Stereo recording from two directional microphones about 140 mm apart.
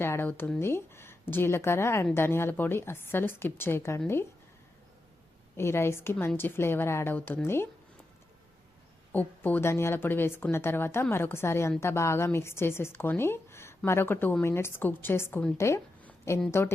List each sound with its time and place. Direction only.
0.0 s speech: 15° left (ahead or behind)
5.5 s speech: 15° left (ahead or behind)
9.1 s a woman's voice: 15° left (ahead or behind)